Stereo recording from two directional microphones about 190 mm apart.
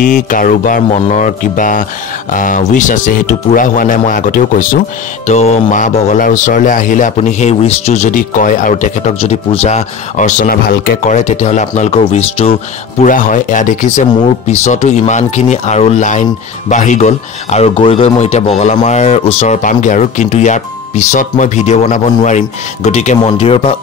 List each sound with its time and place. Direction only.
0.0 s speech: 45° left (ahead or behind)
13.0 s speech: 45° left (ahead or behind)